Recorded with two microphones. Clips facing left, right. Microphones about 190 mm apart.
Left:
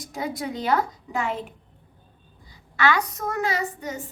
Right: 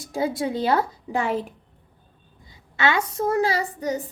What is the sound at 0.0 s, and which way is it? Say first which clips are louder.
A woman's voice: right 5 dB; 30° right (ahead or behind).